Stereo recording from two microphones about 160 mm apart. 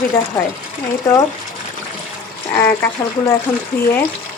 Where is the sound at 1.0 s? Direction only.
20° left (ahead or behind).